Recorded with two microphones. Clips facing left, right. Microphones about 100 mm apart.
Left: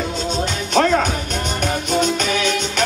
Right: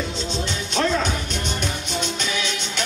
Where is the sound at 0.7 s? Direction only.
55° left (ahead or behind).